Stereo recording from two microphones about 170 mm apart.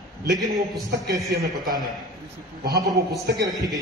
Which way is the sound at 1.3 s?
20° right (ahead or behind).